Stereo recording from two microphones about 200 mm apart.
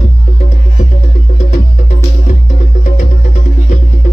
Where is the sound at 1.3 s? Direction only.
35° left (ahead or behind).